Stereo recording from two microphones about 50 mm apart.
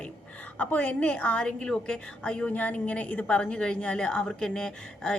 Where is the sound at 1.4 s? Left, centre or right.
Centre.